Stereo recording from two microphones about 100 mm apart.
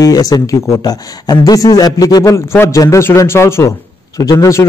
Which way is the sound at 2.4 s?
30° left (ahead or behind).